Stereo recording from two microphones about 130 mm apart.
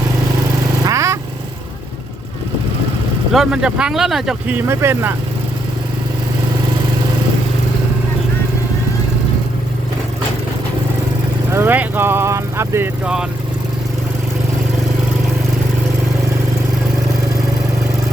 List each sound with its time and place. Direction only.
0.9 s vehicle: 25° right (ahead or behind)
3.3 s speech: 5° right (ahead or behind)
4.4 s speech: 15° right (ahead or behind)
11.5 s speech: 15° right (ahead or behind)